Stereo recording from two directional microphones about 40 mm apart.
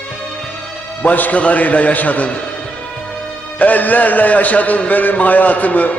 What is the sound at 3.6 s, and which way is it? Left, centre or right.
A man's voice, left.